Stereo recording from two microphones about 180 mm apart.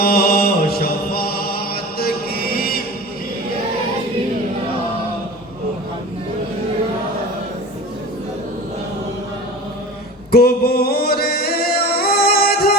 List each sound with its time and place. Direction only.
0.0 s music: 55° left (ahead or behind)
10.3 s music: 60° left (ahead or behind)